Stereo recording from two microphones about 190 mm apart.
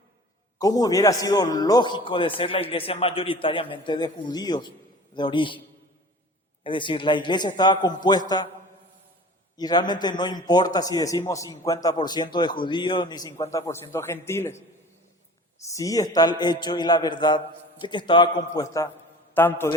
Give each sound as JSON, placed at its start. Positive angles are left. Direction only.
{"t": 0.6, "sound": "a man's voice", "side_deg": 20}
{"t": 6.7, "sound": "a man's voice", "side_deg": 25}
{"t": 9.6, "sound": "a man's voice", "side_deg": 20}
{"t": 15.7, "sound": "a man's voice", "side_deg": 20}